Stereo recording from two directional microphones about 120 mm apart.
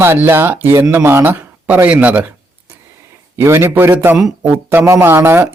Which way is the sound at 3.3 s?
20° right (ahead or behind).